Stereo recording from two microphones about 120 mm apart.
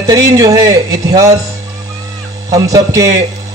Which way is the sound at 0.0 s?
30° right (ahead or behind).